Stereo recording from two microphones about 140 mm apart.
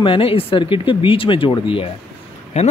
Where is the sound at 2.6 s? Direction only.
50° left (ahead or behind).